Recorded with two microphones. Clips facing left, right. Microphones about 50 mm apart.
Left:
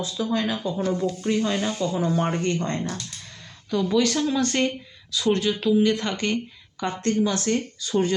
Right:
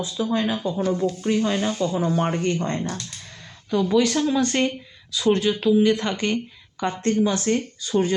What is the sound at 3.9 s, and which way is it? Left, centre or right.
Speech, centre.